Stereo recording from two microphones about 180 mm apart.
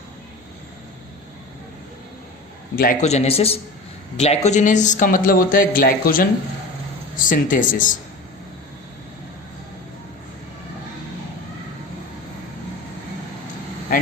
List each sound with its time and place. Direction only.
2.7 s speech: 50° left (ahead or behind)
3.1 s a man's voice: 35° left (ahead or behind)